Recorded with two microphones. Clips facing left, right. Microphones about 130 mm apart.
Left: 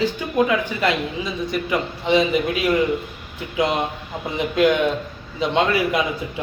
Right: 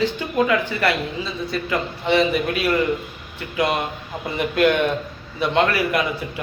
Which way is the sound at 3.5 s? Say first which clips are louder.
Left 1 dB; 20° left (ahead or behind).